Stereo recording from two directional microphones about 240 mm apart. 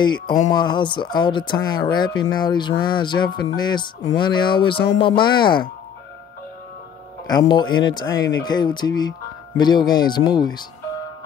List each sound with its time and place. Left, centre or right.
0.0 s speech: centre
7.2 s speech: centre